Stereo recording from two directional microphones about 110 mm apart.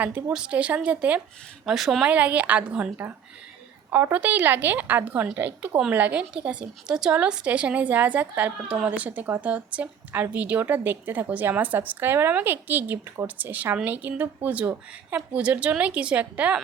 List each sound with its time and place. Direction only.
0.0 s a woman's voice: 15° right (ahead or behind)